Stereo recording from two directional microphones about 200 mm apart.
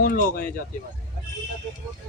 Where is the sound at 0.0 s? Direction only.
45° left (ahead or behind).